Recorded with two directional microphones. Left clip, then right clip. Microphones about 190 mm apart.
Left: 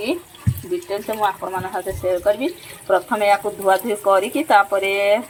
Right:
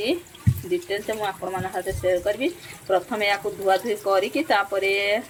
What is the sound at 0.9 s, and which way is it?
Speech, centre (ahead or behind).